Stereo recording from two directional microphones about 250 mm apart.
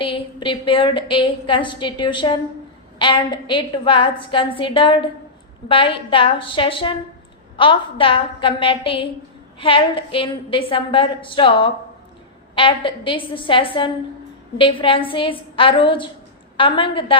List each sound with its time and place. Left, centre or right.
0.0 s a woman's voice: left